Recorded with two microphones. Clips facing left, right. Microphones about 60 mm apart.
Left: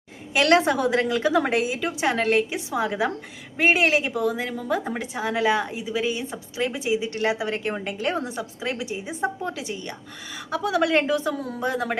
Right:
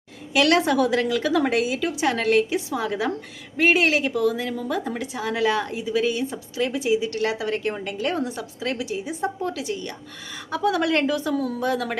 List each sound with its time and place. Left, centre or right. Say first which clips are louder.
0.3 s a woman's voice: even; left